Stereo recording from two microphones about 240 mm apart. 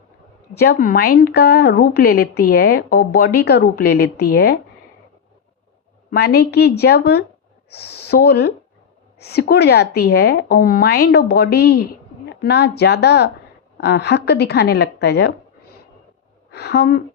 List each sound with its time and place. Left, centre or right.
0.6 s a woman's voice: left
6.1 s a woman's voice: left
16.5 s speech: left